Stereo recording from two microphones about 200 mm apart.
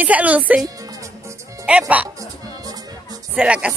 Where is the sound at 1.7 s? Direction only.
5° right (ahead or behind).